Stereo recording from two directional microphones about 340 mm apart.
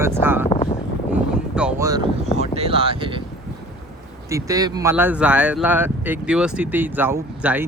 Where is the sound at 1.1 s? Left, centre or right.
Centre.